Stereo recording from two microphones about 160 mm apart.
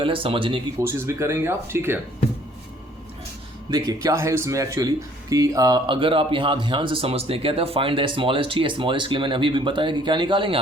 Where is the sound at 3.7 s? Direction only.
20° right (ahead or behind).